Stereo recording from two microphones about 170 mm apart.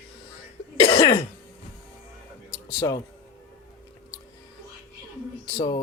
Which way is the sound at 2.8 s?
25° left (ahead or behind).